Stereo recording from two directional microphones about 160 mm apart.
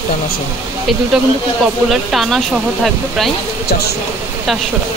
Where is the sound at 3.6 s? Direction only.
85° left.